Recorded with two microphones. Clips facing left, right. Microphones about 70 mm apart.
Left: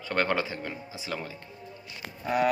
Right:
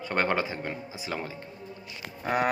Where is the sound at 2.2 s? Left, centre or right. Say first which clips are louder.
Even; right.